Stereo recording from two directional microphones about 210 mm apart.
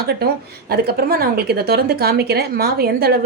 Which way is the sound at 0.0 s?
50° right (ahead or behind).